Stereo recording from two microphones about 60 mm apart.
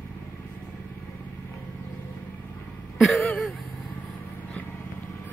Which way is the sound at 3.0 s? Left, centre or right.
Centre.